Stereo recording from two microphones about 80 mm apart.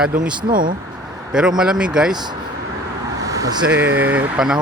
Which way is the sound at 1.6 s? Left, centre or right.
Centre.